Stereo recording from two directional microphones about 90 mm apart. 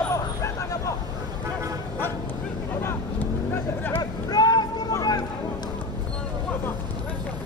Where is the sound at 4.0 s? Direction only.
45° left (ahead or behind).